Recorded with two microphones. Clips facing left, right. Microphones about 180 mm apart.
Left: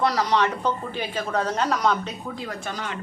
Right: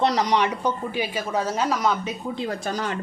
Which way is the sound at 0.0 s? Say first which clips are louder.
Right 1 dB; 20° right (ahead or behind).